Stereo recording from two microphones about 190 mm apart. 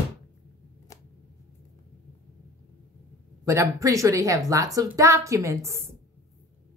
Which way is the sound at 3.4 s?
15° right (ahead or behind).